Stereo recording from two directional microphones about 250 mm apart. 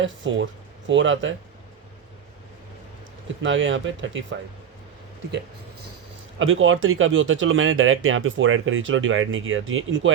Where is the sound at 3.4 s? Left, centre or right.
Right.